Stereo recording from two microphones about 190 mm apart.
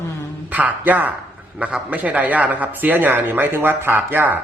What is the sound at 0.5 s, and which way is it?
Speech, 10° right (ahead or behind).